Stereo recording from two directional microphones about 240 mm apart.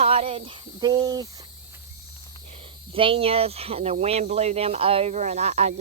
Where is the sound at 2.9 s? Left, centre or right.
Right.